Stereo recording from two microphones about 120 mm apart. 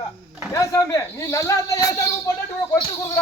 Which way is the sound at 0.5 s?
30° left (ahead or behind).